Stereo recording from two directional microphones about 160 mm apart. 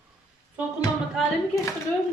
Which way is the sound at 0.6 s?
10° right (ahead or behind).